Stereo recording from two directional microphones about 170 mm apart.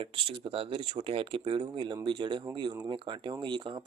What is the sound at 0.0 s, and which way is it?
Speech, 30° right (ahead or behind).